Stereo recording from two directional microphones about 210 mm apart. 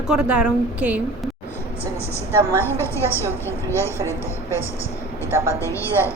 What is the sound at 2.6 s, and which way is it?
A woman's voice, 10° left (ahead or behind).